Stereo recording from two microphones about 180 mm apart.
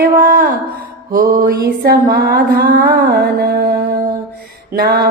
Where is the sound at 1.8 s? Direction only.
60° right (ahead or behind).